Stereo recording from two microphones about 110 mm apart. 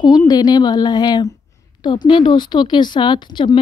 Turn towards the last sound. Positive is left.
turn(degrees=45)  # may be behind; listen again after turning